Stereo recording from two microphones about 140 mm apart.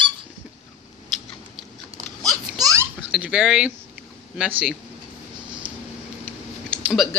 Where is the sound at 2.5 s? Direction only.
25° right (ahead or behind).